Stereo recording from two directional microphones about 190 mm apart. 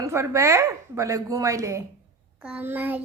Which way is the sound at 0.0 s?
15° right (ahead or behind).